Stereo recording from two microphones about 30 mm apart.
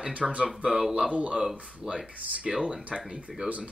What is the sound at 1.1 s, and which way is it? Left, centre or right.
Speech, right.